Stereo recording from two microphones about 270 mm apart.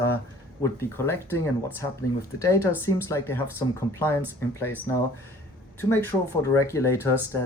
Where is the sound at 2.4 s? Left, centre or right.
Centre.